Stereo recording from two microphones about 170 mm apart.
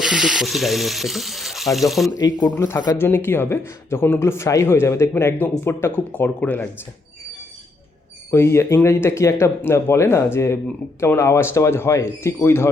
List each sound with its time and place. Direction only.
0.0 s water: 5° right (ahead or behind)
2.0 s speech: 20° left (ahead or behind)
8.3 s speech: 15° left (ahead or behind)